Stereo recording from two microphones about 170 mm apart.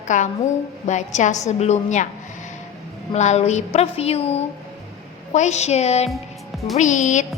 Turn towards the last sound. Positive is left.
turn(degrees=45)  # may be behind; listen again after turning